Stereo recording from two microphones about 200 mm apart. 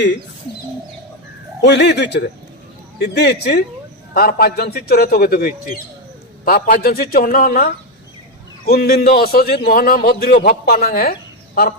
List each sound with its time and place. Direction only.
1.6 s a man's voice: 60° left (ahead or behind)